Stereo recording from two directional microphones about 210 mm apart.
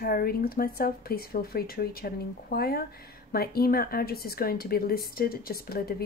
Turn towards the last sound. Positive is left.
turn(degrees=45)  # may be behind; listen again after turning